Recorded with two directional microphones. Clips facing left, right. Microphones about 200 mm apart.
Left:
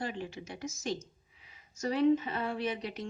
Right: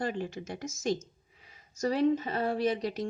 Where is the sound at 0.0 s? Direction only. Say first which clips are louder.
Right 4 dB; 45° right (ahead or behind).